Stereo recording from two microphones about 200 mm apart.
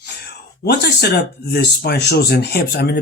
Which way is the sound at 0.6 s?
55° left (ahead or behind).